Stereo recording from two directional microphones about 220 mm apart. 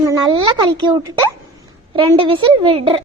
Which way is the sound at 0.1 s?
20° right (ahead or behind).